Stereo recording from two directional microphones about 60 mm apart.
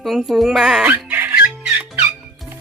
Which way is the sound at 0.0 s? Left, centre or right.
Centre.